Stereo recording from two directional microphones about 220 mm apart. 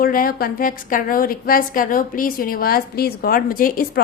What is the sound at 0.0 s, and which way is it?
A woman's voice, 40° left (ahead or behind).